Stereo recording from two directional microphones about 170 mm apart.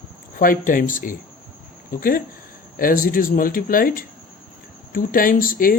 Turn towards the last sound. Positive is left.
turn(degrees=55)  # may be behind; listen again after turning